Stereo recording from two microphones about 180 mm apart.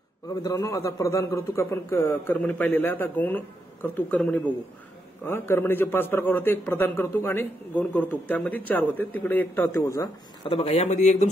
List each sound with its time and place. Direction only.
0.3 s a man's voice: 20° left (ahead or behind)
10.5 s a man's voice: 35° left (ahead or behind)